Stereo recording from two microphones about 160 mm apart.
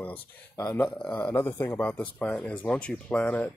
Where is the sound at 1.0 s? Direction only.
10° left (ahead or behind).